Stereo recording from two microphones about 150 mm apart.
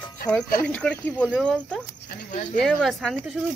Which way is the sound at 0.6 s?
10° left (ahead or behind).